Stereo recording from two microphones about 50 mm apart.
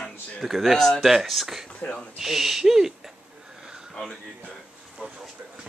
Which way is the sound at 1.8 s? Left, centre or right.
Left.